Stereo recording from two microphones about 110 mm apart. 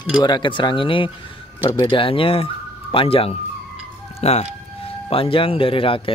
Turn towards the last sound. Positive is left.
turn(degrees=55)  # may be behind; listen again after turning